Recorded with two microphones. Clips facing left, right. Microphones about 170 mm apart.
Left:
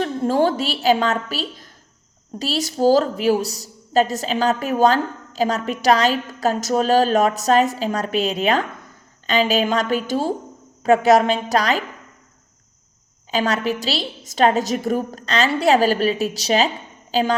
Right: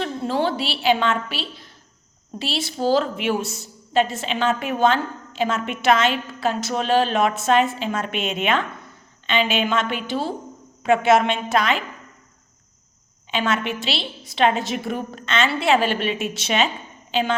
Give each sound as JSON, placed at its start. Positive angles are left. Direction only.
{"t": 0.0, "sound": "a woman's voice", "side_deg": 45}
{"t": 13.3, "sound": "a woman's voice", "side_deg": 40}